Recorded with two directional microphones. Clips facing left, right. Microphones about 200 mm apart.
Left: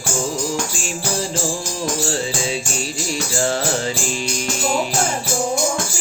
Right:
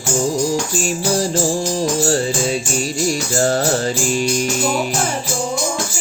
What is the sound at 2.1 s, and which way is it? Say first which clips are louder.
Music: right 5 dB; 45° right (ahead or behind).